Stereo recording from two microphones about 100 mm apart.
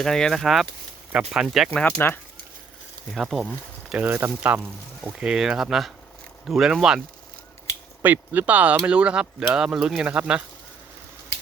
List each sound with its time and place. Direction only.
0.0 s speech: 5° left (ahead or behind)
2.0 s speech: 20° left (ahead or behind)
3.1 s speech: centre (ahead or behind)
3.8 s speech: 15° right (ahead or behind)
8.0 s speech: 20° right (ahead or behind)